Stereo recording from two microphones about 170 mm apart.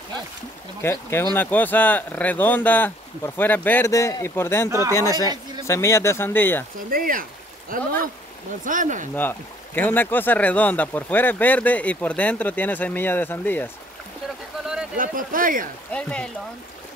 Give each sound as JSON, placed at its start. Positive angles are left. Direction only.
{"t": 0.8, "sound": "speech", "side_deg": 15}
{"t": 4.6, "sound": "speech", "side_deg": -15}
{"t": 5.7, "sound": "speech", "side_deg": 15}
{"t": 6.9, "sound": "speech", "side_deg": -55}
{"t": 9.1, "sound": "speech", "side_deg": 10}
{"t": 14.6, "sound": "a sound", "side_deg": -5}
{"t": 15.0, "sound": "speech", "side_deg": -55}
{"t": 15.9, "sound": "speech", "side_deg": 5}